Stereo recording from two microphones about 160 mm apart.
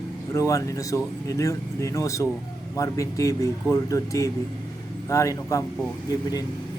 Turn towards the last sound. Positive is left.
turn(degrees=25)  # may be behind; listen again after turning